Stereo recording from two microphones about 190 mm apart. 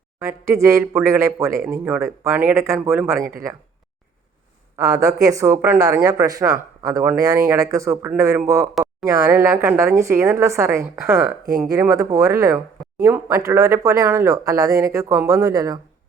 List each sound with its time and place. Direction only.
0.2 s speech: 15° right (ahead or behind)
4.8 s speech: 20° right (ahead or behind)
8.6 s a sound: 5° right (ahead or behind)
9.0 s speech: 15° right (ahead or behind)